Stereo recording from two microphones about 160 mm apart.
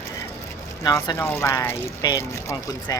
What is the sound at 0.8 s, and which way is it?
Speech, 20° left (ahead or behind).